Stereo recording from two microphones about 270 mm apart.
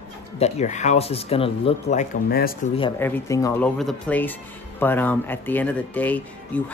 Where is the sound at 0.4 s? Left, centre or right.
Left.